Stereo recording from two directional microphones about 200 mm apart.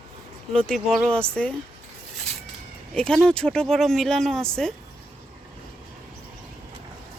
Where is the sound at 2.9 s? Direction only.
5° left (ahead or behind).